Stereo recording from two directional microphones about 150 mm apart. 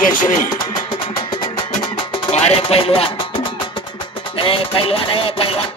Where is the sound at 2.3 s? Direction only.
40° left (ahead or behind).